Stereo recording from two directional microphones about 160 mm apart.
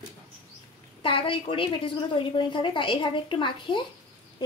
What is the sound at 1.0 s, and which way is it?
A woman's voice, 35° left (ahead or behind).